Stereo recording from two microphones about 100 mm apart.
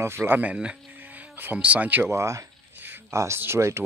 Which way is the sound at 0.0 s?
25° right (ahead or behind).